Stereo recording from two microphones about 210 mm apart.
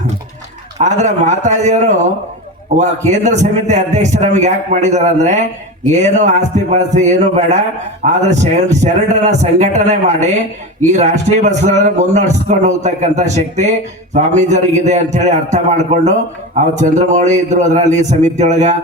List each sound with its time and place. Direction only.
0.8 s a man's voice: 35° right (ahead or behind)
3.1 s a man's voice: 35° right (ahead or behind)